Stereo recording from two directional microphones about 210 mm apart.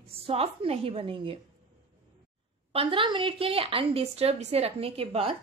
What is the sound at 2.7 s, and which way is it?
A woman's voice, 25° right (ahead or behind).